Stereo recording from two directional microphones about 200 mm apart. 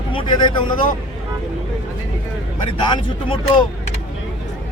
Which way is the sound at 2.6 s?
25° left (ahead or behind).